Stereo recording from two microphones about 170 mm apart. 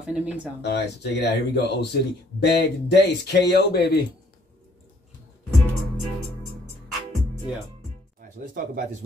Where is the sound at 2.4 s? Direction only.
90° left; by 4.0 s 70° left (ahead or behind).